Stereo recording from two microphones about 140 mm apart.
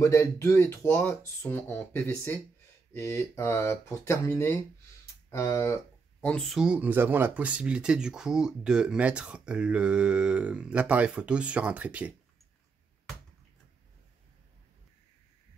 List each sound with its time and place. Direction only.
0.0 s speech: 20° left (ahead or behind)
6.2 s speech: 5° left (ahead or behind)